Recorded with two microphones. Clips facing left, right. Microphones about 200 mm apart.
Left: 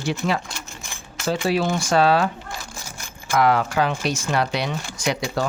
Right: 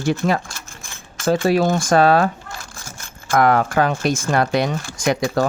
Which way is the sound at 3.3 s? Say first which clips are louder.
Right 3 dB; 50° right (ahead or behind).